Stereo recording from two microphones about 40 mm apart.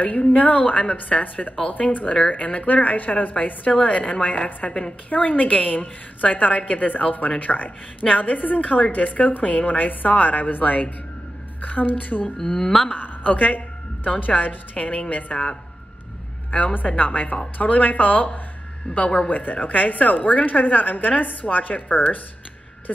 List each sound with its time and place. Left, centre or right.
0.3 s a woman's voice: left
12.4 s a woman's voice: centre
12.9 s a woman's voice: left
18.9 s a woman's voice: left